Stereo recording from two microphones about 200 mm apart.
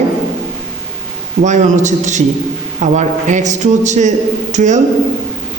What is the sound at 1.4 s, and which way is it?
A man's voice, 35° right (ahead or behind).